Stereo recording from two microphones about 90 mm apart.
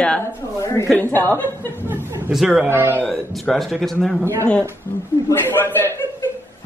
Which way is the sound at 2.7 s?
25° right (ahead or behind).